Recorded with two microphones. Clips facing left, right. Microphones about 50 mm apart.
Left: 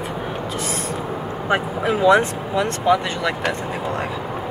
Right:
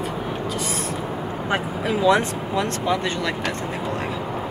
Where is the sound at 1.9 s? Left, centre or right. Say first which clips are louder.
Left 3 dB; centre.